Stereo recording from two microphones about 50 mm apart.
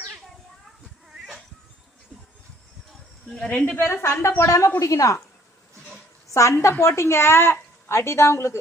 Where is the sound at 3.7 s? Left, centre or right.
Left.